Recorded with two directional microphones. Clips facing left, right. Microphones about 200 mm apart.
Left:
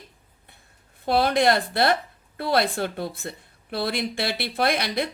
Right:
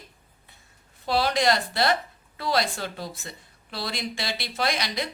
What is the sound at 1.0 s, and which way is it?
Speech, 55° left (ahead or behind).